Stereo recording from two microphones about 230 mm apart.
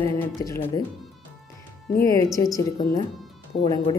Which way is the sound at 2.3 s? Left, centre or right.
Centre.